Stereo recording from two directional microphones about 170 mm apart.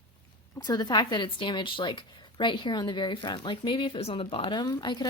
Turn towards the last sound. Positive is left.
turn(degrees=25)  # may be behind; listen again after turning